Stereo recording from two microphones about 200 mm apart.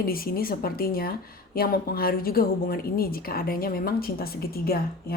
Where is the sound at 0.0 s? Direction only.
45° left (ahead or behind).